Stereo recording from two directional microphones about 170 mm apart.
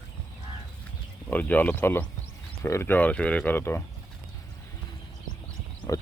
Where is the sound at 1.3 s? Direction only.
10° left (ahead or behind).